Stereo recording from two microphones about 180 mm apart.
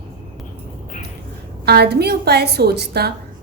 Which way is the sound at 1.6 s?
65° right (ahead or behind).